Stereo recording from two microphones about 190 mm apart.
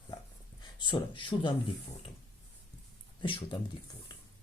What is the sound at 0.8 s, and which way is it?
Speech, 25° left (ahead or behind).